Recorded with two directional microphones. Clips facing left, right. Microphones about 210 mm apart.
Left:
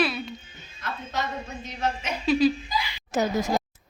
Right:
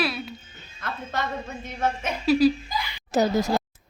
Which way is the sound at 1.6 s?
50° right (ahead or behind).